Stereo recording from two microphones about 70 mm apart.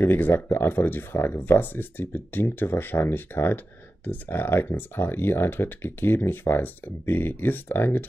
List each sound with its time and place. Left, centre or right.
0.0 s speech: left